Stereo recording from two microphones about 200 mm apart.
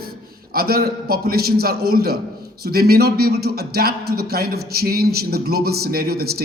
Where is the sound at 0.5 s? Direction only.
50° right (ahead or behind).